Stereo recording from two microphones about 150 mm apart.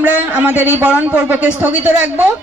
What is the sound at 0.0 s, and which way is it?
A man's voice, 10° right (ahead or behind).